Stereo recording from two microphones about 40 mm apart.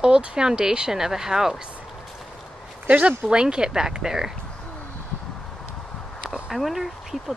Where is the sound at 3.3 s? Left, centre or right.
Right.